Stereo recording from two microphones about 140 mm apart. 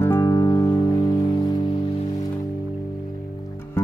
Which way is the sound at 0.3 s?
25° left (ahead or behind).